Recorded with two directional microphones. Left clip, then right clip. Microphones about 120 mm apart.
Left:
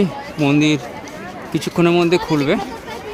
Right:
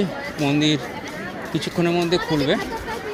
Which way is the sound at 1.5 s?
55° left (ahead or behind).